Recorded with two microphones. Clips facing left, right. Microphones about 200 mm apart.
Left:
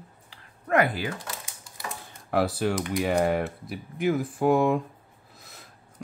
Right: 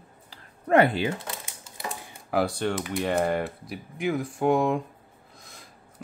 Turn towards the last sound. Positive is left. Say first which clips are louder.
# even
turn(degrees=5)  # may be behind; listen again after turning